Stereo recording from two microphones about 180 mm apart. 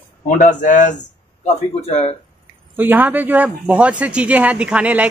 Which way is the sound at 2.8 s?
10° right (ahead or behind).